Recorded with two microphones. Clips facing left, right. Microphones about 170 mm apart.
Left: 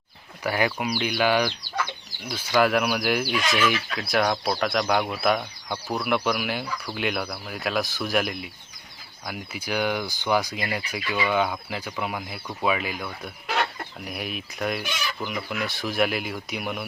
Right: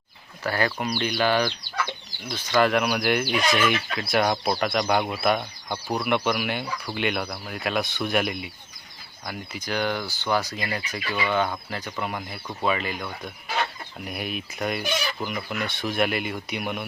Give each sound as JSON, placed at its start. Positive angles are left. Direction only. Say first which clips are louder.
{"t": 0.4, "sound": "speech", "louder": "left 1 dB", "side_deg": 15}